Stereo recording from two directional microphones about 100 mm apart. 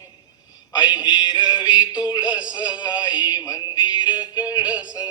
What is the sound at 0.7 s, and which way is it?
Music, 45° left (ahead or behind).